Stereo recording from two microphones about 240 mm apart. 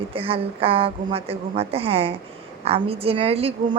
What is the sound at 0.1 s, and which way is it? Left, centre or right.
A woman's voice, right.